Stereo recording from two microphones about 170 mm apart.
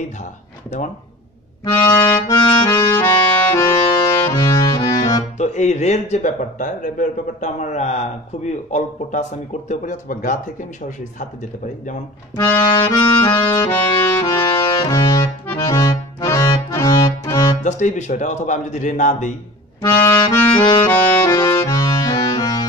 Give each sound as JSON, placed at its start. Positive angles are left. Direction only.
{"t": 1.6, "sound": "accordion", "side_deg": 20}
{"t": 4.8, "sound": "music", "side_deg": 20}
{"t": 5.4, "sound": "speech", "side_deg": 40}
{"t": 12.4, "sound": "accordion", "side_deg": 25}
{"t": 17.5, "sound": "speech", "side_deg": 45}
{"t": 19.8, "sound": "accordion", "side_deg": 20}
{"t": 22.4, "sound": "music", "side_deg": 25}